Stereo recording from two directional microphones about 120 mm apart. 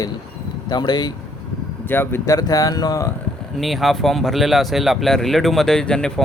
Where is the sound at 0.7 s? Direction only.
35° left (ahead or behind).